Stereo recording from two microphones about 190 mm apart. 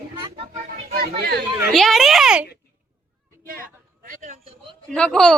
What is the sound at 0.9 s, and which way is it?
Speech, 55° right (ahead or behind).